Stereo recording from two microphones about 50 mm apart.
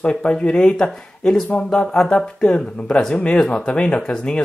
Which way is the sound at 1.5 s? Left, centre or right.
Centre.